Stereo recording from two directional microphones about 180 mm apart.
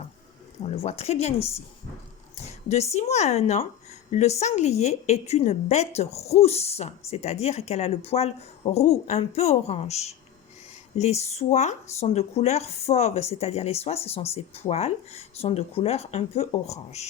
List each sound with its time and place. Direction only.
0.8 s speech: 35° left (ahead or behind)
2.4 s a sound: 35° left (ahead or behind)
2.9 s speech: 40° left (ahead or behind)